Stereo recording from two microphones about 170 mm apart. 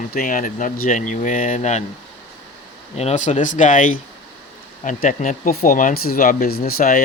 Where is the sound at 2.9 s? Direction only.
40° left (ahead or behind).